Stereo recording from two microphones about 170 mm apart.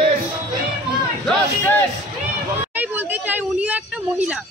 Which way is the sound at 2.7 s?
10° right (ahead or behind).